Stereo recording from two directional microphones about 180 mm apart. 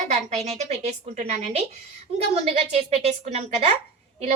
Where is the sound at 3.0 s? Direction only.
35° right (ahead or behind).